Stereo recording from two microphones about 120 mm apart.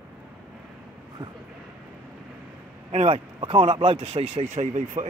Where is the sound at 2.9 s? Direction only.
65° right (ahead or behind).